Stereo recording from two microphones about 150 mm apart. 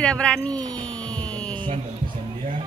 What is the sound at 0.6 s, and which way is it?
Speech, 25° right (ahead or behind).